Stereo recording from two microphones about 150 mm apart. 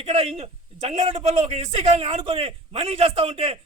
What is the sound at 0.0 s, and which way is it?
A man's voice, 40° right (ahead or behind).